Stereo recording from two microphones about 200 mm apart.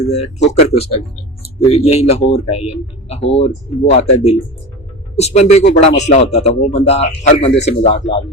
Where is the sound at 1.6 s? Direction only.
30° left (ahead or behind).